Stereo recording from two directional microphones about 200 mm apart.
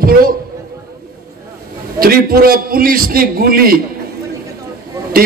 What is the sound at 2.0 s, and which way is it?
Speech, 50° right (ahead or behind).